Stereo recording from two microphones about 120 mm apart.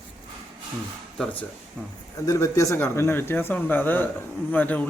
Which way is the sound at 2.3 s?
25° left (ahead or behind).